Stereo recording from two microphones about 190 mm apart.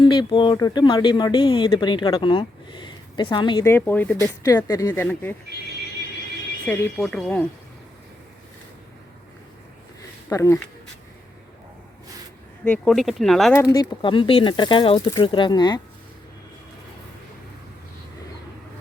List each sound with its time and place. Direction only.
0.0 s speech: 25° left (ahead or behind)
3.7 s speech: 10° left (ahead or behind)
6.7 s speech: centre (ahead or behind)
10.2 s speech: 15° left (ahead or behind)
12.6 s speech: 5° left (ahead or behind)
13.5 s speech: 15° left (ahead or behind)
14.0 s speech: 25° left (ahead or behind)